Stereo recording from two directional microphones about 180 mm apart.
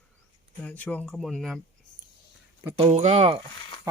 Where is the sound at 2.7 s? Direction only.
35° right (ahead or behind).